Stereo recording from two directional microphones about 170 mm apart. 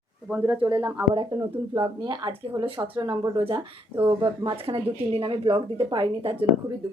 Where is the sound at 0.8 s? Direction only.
15° right (ahead or behind).